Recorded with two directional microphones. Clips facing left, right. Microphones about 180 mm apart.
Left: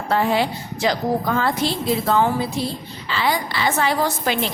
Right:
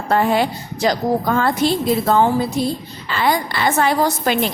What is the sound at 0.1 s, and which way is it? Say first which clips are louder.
A woman's voice: right 3 dB; 50° right (ahead or behind).